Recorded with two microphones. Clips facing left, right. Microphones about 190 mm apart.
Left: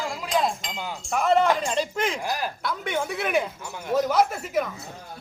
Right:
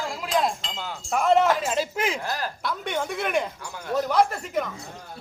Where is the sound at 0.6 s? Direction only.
15° left (ahead or behind).